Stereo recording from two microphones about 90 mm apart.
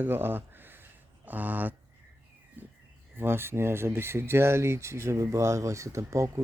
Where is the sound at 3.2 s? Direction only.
25° right (ahead or behind).